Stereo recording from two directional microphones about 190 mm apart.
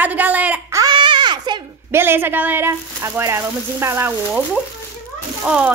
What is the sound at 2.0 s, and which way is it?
A woman's voice, 10° right (ahead or behind).